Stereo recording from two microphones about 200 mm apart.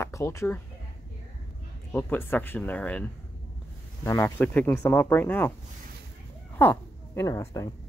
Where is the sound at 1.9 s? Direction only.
10° left (ahead or behind).